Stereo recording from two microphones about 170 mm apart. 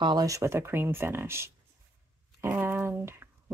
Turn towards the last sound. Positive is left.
turn(degrees=-15)  # may be behind; listen again after turning